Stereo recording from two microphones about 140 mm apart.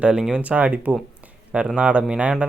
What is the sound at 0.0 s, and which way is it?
Speech, 5° right (ahead or behind).